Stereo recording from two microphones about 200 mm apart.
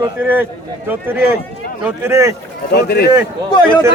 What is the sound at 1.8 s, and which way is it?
Speech, 10° right (ahead or behind).